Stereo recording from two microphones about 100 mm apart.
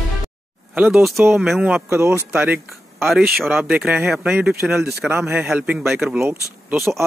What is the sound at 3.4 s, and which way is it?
Speech, centre (ahead or behind).